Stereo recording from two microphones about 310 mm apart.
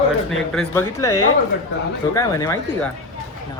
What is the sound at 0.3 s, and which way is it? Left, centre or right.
Speech, centre.